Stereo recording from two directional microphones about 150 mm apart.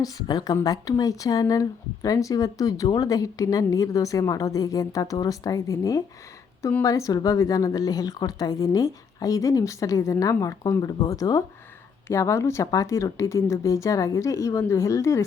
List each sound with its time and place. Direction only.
0.0 s speech: 25° left (ahead or behind)